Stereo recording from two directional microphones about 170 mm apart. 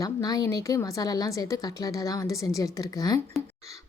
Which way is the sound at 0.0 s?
20° left (ahead or behind).